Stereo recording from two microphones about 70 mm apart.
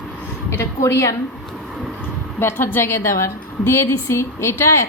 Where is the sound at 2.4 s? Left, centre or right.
Left.